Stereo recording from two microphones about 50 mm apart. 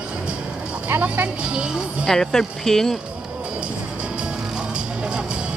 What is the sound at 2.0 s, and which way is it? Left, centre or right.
Speech, centre.